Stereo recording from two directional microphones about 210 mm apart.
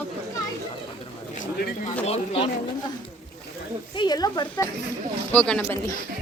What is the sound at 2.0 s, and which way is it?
Speech, 30° left (ahead or behind).